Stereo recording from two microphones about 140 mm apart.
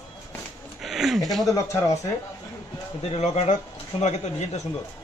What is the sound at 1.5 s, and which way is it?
Speech, 20° left (ahead or behind).